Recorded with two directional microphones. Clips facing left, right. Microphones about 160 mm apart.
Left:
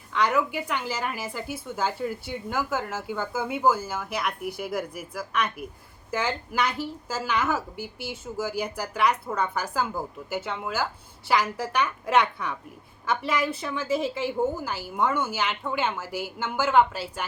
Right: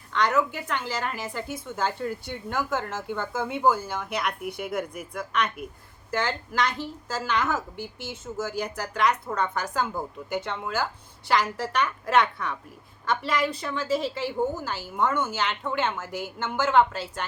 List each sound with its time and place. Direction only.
0.1 s a woman's voice: 10° left (ahead or behind)